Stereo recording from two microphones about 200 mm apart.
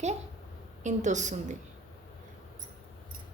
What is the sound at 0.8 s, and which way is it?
Speech, 35° right (ahead or behind).